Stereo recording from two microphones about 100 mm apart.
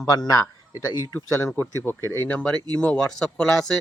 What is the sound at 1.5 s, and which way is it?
Speech, 25° left (ahead or behind).